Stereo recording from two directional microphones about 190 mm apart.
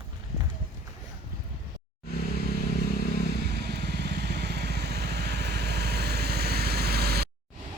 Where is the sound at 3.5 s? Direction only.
60° right (ahead or behind).